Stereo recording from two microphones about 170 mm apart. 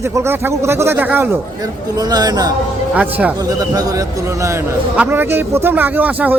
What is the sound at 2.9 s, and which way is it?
Speech, 10° right (ahead or behind).